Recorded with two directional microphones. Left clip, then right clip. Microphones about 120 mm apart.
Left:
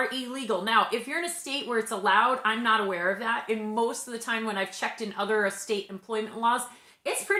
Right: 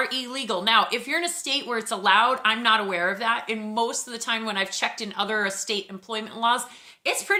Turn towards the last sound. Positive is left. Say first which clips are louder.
# right 4 dB
turn(degrees=-25)  # may be behind; listen again after turning